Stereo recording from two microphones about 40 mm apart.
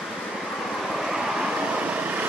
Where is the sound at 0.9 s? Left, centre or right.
Centre.